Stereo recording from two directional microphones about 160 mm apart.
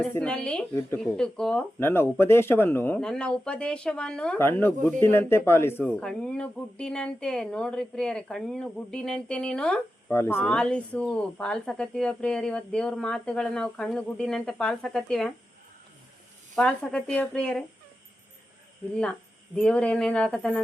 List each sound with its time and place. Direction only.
0.0 s speech: 10° left (ahead or behind)
1.8 s speech: 15° left (ahead or behind)
16.6 s speech: 5° left (ahead or behind)
19.5 s speech: 5° left (ahead or behind)